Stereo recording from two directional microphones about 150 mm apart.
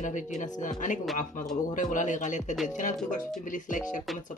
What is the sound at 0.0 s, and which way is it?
Speech, 55° left (ahead or behind).